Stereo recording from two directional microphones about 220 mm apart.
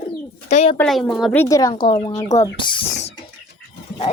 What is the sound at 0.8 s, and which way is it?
A child's voice, 5° left (ahead or behind).